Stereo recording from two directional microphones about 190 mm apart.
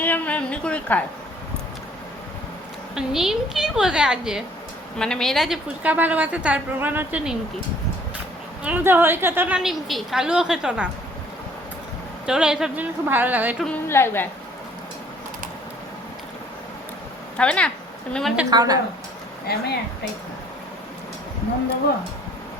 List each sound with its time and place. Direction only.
0.0 s a woman's voice: 10° left (ahead or behind)
2.9 s a woman's voice: centre (ahead or behind)
8.6 s a woman's voice: 10° right (ahead or behind)
12.2 s a woman's voice: 5° right (ahead or behind)
13.7 s a woman's voice: 15° left (ahead or behind)
17.3 s a woman's voice: 5° left (ahead or behind)
18.5 s a woman's voice: 20° right (ahead or behind)
19.5 s speech: 55° left (ahead or behind)